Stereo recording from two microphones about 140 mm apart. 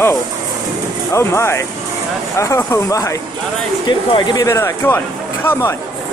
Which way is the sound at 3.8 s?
35° left (ahead or behind).